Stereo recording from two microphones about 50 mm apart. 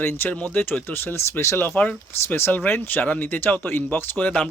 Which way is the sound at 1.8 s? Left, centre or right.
Left.